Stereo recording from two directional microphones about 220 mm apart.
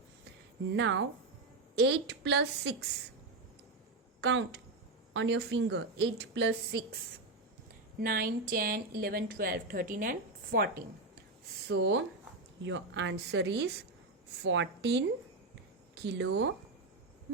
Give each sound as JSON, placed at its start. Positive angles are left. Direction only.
{"t": 0.7, "sound": "a woman's voice", "side_deg": -55}
{"t": 4.2, "sound": "a woman's voice", "side_deg": -50}
{"t": 7.9, "sound": "a woman's voice", "side_deg": -40}
{"t": 11.7, "sound": "a woman's voice", "side_deg": -55}